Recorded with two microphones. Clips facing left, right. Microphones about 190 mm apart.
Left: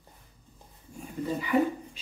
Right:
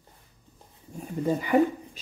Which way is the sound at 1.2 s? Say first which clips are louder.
Right 4 dB; 45° right (ahead or behind).